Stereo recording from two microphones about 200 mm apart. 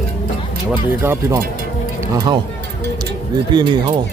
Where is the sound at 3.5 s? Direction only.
20° right (ahead or behind).